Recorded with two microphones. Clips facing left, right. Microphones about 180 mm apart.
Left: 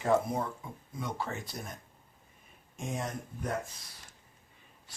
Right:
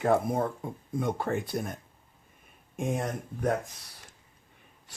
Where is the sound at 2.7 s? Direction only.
60° right (ahead or behind).